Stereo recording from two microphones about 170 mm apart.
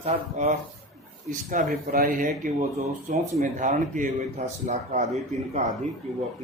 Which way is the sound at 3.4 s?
50° right (ahead or behind).